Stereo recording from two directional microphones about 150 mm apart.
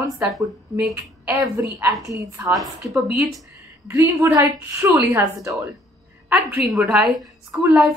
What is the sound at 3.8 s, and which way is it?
A woman's voice, 20° right (ahead or behind).